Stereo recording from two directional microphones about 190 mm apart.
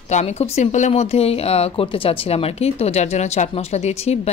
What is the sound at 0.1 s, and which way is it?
Speech, 35° left (ahead or behind).